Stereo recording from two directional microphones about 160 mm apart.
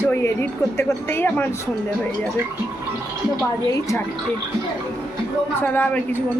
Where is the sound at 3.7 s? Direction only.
20° left (ahead or behind).